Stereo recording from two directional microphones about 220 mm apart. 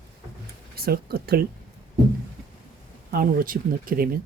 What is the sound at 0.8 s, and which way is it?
Speech, 45° right (ahead or behind).